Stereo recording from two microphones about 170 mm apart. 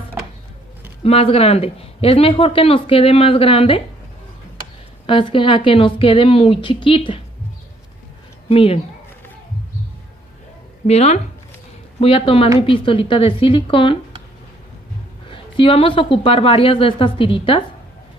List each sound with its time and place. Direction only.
1.0 s speech: 35° left (ahead or behind)
5.0 s speech: 30° left (ahead or behind)
8.5 s speech: 35° left (ahead or behind)
10.9 s speech: 40° left (ahead or behind)
15.2 s speech: 30° left (ahead or behind)